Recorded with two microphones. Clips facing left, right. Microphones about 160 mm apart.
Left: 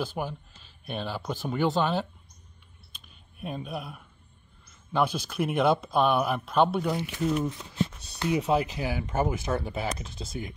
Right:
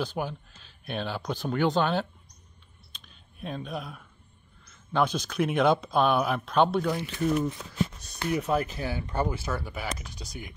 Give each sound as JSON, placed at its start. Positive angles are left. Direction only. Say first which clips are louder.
{"t": 0.0, "sound": "speech", "louder": "right 1 dB", "side_deg": 5}
{"t": 2.9, "sound": "a sound", "louder": "right 1 dB", "side_deg": 5}
{"t": 4.9, "sound": "speech", "louder": "right 1 dB", "side_deg": 5}
{"t": 8.3, "sound": "speech", "louder": "left 2 dB", "side_deg": 15}